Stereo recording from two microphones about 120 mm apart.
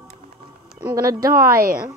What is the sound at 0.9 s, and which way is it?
Speech, 30° right (ahead or behind).